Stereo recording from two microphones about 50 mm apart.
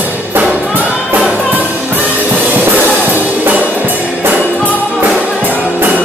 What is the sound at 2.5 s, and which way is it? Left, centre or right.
Music, right.